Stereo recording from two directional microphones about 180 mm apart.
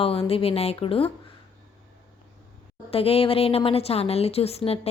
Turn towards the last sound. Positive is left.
turn(degrees=35)  # may be behind; listen again after turning